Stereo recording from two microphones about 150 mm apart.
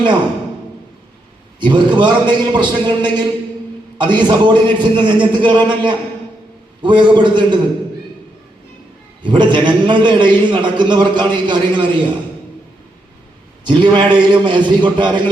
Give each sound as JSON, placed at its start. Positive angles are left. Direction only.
{"t": 1.6, "sound": "a man's voice", "side_deg": -30}
{"t": 9.2, "sound": "a man's voice", "side_deg": -30}
{"t": 13.7, "sound": "a man's voice", "side_deg": -30}